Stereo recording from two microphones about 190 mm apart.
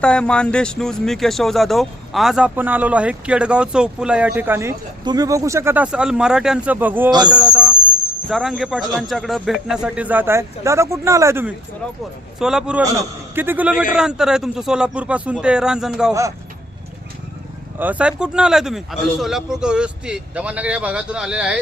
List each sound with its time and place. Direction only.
0.0 s a man's voice: 5° left (ahead or behind); by 7.1 s 10° right (ahead or behind)
7.1 s a man's voice: 20° right (ahead or behind)
7.3 s a sound: 5° right (ahead or behind)
8.3 s a man's voice: centre (ahead or behind)
17.7 s speech: 10° right (ahead or behind)